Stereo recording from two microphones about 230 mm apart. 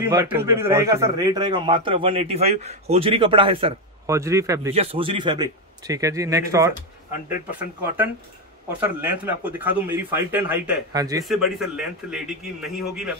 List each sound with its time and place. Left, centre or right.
0.0 s a man's voice: centre
4.7 s a man's voice: right; by 8.1 s centre
9.2 s a man's voice: centre
11.2 s a man's voice: centre